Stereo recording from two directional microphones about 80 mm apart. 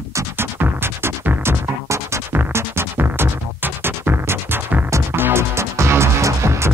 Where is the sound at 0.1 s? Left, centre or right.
Right.